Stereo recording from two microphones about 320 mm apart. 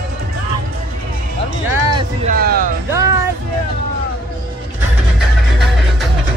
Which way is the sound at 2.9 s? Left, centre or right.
Centre.